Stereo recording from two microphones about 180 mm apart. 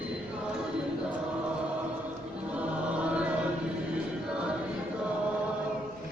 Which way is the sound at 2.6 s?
5° right (ahead or behind).